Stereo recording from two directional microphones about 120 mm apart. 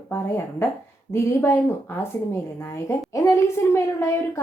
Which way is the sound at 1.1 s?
20° left (ahead or behind).